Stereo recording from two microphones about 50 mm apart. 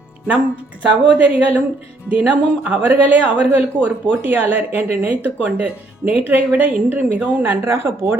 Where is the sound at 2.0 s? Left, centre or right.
Right.